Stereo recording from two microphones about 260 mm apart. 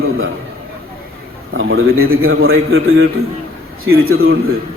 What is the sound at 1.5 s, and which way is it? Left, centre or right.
A man's voice, right.